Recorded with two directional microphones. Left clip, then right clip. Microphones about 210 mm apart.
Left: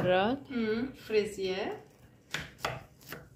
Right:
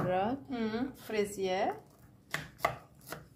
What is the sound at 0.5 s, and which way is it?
A woman's voice, 55° right (ahead or behind).